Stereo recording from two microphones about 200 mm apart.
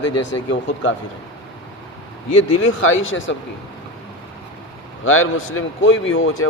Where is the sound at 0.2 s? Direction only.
65° left (ahead or behind).